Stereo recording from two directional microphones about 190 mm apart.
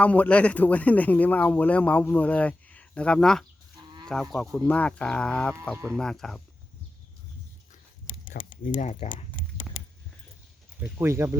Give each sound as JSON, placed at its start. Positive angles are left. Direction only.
{"t": 0.0, "sound": "speech", "side_deg": 5}
{"t": 5.7, "sound": "speech", "side_deg": -15}
{"t": 6.0, "sound": "speech", "side_deg": 5}
{"t": 8.3, "sound": "speech", "side_deg": 45}
{"t": 10.8, "sound": "speech", "side_deg": -15}